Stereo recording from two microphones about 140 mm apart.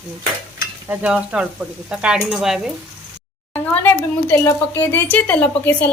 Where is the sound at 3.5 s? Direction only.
15° left (ahead or behind).